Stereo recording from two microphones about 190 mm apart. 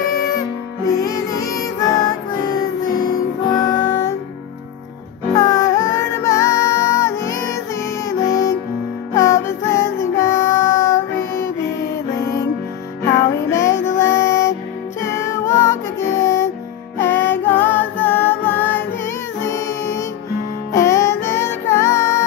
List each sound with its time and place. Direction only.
0.8 s music: 20° left (ahead or behind)
5.3 s music: 15° left (ahead or behind)
20.7 s music: 15° left (ahead or behind)